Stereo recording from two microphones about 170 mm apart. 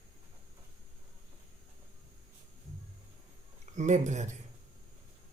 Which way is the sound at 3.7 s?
45° right (ahead or behind).